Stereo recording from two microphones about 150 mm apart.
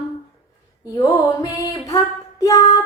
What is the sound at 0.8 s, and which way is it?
Female singing, 25° left (ahead or behind).